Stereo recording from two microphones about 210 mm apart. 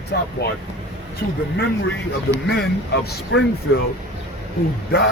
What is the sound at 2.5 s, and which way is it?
Speech, 50° left (ahead or behind).